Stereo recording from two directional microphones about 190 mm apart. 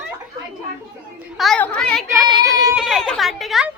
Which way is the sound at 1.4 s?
5° left (ahead or behind).